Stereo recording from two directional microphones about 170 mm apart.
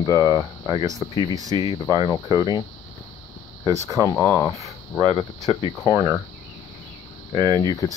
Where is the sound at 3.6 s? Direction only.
20° right (ahead or behind).